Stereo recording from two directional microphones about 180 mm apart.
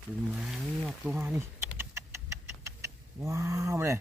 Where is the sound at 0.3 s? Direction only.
Centre (ahead or behind).